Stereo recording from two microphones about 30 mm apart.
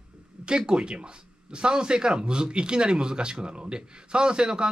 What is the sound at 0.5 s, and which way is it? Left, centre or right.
Speech, right.